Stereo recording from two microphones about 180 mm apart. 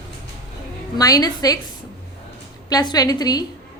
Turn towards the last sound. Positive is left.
turn(degrees=20)  # may be behind; listen again after turning